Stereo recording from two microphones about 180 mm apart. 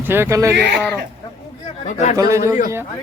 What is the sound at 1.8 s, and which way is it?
Speech, 40° left (ahead or behind).